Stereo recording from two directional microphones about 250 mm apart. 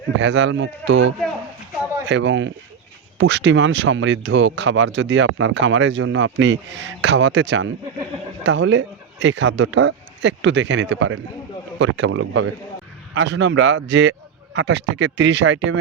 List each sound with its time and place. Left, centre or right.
0.2 s speech: right